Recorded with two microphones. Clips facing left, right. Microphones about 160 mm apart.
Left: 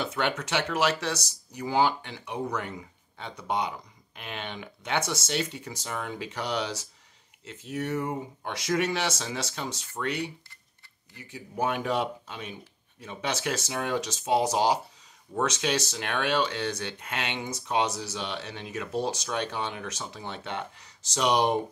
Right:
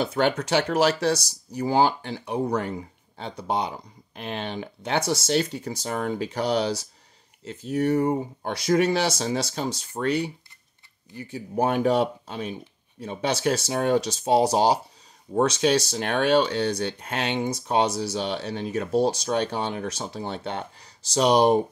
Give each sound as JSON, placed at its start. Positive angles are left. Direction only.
{"t": 0.0, "sound": "speech", "side_deg": -35}